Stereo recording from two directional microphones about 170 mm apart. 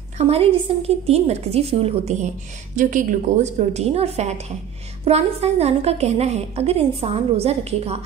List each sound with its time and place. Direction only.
0.2 s a woman's voice: 35° right (ahead or behind)